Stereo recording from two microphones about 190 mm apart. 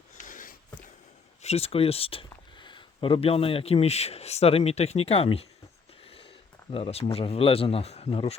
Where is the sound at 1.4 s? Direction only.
30° left (ahead or behind).